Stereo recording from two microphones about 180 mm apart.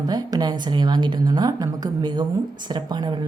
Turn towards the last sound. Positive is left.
turn(degrees=-25)  # may be behind; listen again after turning